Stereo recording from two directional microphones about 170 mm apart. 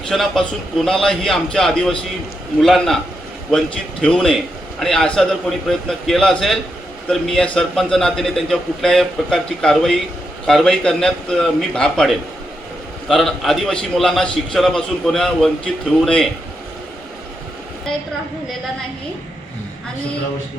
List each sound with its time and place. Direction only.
0.1 s a man's voice: centre (ahead or behind)
4.0 s a man's voice: 5° left (ahead or behind)